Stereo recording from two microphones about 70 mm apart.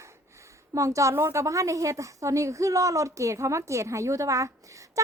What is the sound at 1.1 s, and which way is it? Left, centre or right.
A woman's voice, right.